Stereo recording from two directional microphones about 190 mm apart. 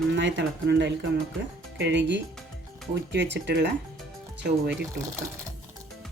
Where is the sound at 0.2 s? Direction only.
70° right (ahead or behind).